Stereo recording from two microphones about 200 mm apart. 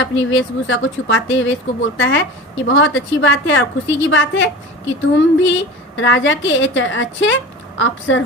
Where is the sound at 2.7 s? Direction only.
70° left (ahead or behind).